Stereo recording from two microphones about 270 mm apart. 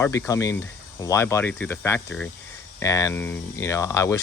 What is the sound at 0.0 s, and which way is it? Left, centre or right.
Speech, centre.